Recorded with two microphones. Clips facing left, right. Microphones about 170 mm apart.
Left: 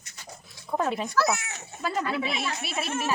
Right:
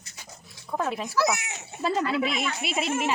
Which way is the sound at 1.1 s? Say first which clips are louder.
Right 3 dB; 15° right (ahead or behind).